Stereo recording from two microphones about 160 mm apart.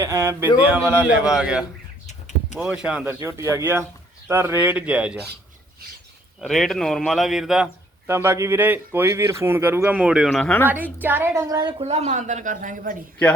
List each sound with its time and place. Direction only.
0.0 s speech: 20° right (ahead or behind)
2.0 s a sound: 45° left (ahead or behind)
2.6 s speech: 5° right (ahead or behind)
3.2 s speech: 20° right (ahead or behind)
6.4 s speech: centre (ahead or behind)
8.0 s speech: 15° right (ahead or behind); by 10.7 s 10° left (ahead or behind)
10.7 s speech: 10° right (ahead or behind)
11.4 s a woman's voice: 25° right (ahead or behind)
11.8 s a woman's voice: 40° right (ahead or behind)